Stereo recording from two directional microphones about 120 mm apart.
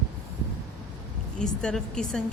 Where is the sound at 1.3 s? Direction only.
5° left (ahead or behind).